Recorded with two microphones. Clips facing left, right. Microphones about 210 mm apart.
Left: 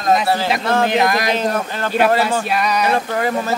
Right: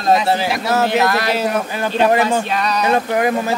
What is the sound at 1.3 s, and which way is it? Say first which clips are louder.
Speech: right 1 dB; 10° right (ahead or behind).